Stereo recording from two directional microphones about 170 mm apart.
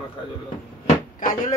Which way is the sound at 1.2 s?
50° left (ahead or behind).